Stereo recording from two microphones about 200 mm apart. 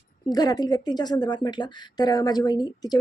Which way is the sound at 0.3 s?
20° left (ahead or behind).